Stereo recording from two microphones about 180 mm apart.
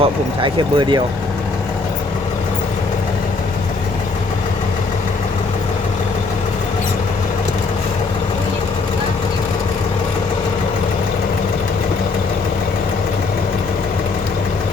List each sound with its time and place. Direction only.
0.0 s speech: 25° right (ahead or behind)